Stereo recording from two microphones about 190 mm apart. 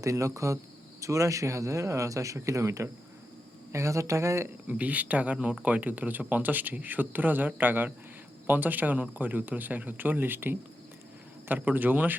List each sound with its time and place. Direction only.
0.0 s speech: 15° right (ahead or behind)